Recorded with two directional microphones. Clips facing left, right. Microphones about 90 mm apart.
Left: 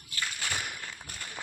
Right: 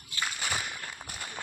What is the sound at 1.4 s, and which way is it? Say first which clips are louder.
Run: even; 5° right (ahead or behind).